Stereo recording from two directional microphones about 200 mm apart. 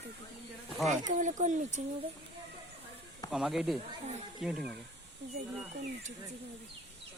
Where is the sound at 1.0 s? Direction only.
40° right (ahead or behind).